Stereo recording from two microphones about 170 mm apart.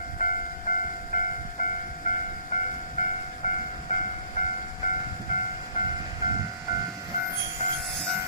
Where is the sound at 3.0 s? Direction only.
50° left (ahead or behind).